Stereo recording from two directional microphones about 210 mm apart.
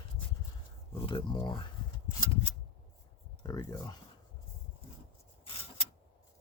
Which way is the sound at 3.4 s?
15° left (ahead or behind).